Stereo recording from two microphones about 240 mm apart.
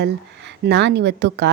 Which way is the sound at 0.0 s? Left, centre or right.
Right.